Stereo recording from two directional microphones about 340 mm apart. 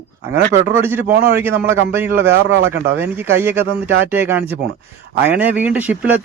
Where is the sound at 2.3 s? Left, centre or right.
Right.